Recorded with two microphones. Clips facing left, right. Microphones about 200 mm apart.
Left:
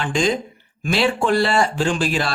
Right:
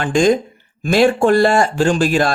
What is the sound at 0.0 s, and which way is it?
Speech, 50° right (ahead or behind).